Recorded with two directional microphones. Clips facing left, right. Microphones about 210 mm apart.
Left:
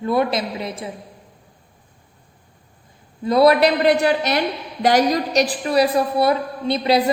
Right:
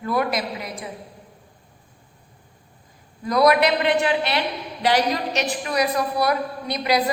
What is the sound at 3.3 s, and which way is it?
A woman's voice, 30° left (ahead or behind).